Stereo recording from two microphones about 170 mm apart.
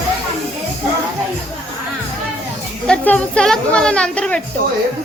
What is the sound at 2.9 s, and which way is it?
A woman's voice, 5° left (ahead or behind).